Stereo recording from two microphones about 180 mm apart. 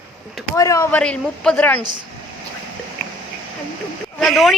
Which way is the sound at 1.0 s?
5° left (ahead or behind).